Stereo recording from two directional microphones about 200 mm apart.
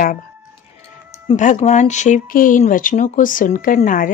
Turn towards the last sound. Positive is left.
turn(degrees=40)  # may be behind; listen again after turning